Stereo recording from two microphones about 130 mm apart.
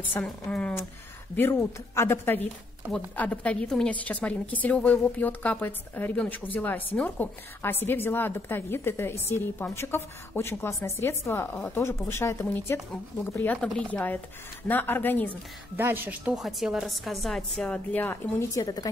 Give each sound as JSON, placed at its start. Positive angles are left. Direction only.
{"t": 0.2, "sound": "a woman's voice", "side_deg": 10}
{"t": 13.6, "sound": "a woman's voice", "side_deg": 5}
{"t": 15.7, "sound": "speech", "side_deg": -15}
{"t": 16.3, "sound": "a woman's voice", "side_deg": 0}
{"t": 18.5, "sound": "a woman's voice", "side_deg": 25}